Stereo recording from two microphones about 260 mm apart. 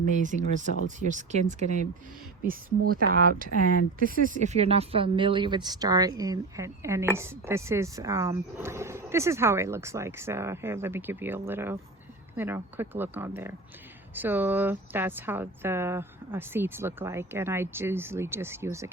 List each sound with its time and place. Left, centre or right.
0.1 s speech: right; by 18.9 s centre